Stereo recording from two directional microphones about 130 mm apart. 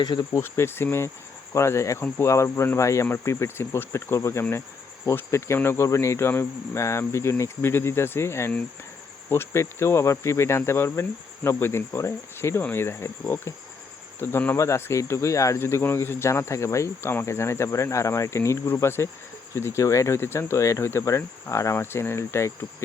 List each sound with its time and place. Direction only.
0.0 s speech: 30° left (ahead or behind)
0.4 s speech: 20° left (ahead or behind)
14.2 s speech: 20° left (ahead or behind)